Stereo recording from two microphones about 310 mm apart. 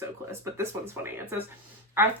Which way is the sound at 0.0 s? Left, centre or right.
Centre.